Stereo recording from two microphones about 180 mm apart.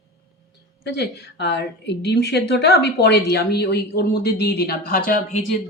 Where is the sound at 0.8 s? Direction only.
65° left (ahead or behind).